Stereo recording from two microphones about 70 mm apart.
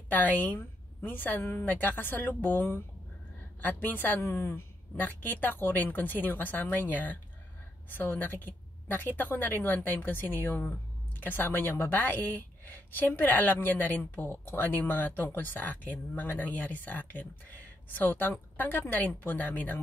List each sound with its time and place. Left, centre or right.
0.1 s speech: left